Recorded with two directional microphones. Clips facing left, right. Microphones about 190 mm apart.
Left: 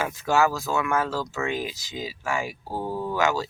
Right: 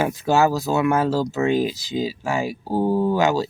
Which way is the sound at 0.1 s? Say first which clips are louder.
Right 4 dB; 35° right (ahead or behind).